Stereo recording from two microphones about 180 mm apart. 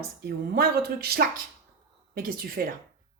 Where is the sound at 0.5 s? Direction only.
60° right (ahead or behind).